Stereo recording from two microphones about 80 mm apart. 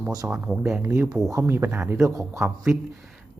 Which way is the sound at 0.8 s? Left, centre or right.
Right.